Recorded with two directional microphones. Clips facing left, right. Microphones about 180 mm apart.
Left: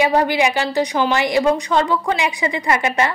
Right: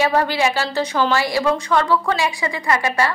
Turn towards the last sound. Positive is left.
turn(degrees=20)  # may be behind; listen again after turning